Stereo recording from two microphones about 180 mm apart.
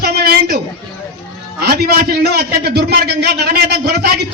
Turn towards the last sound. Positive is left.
turn(degrees=-65)  # may be behind; listen again after turning